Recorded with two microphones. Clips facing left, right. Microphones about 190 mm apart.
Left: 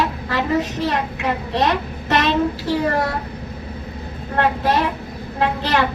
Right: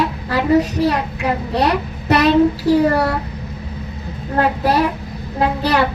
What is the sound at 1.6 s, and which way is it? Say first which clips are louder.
A child's voice: right 1 dB; 35° right (ahead or behind).